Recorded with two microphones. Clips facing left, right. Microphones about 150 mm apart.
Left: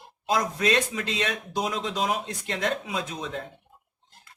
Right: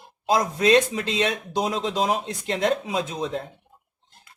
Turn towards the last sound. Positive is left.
turn(degrees=-30)  # may be behind; listen again after turning